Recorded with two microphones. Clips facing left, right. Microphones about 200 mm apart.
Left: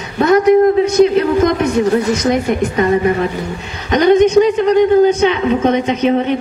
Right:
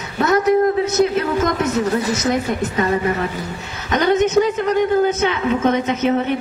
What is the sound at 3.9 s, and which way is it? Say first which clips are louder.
A woman's voice: left 6 dB; 15° left (ahead or behind).